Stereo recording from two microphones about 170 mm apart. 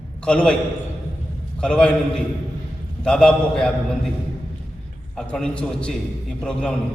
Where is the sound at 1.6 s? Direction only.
5° left (ahead or behind).